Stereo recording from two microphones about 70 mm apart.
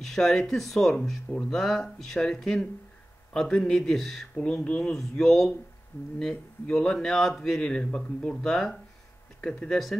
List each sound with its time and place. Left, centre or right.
0.0 s speech: centre
4.5 s speech: centre
5.2 s speech: centre
6.7 s speech: centre
7.6 s speech: centre